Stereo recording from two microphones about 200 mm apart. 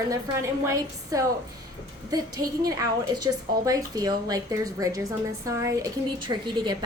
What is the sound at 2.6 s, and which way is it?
A woman's voice, 20° right (ahead or behind).